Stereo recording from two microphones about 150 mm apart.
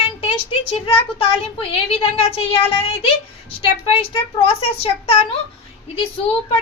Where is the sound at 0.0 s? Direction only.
40° left (ahead or behind).